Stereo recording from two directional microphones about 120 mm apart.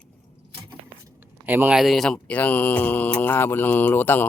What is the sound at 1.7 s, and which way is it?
Speech, centre (ahead or behind).